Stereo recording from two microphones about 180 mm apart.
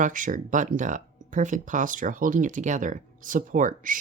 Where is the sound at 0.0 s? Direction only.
45° right (ahead or behind).